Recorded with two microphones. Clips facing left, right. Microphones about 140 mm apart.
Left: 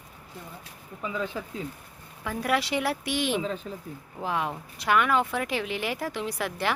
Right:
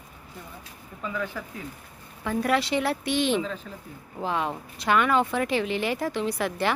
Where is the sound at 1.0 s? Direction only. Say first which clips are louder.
Even; 20° left (ahead or behind).